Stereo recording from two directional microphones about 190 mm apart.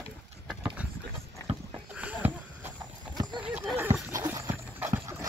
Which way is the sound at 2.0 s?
10° right (ahead or behind).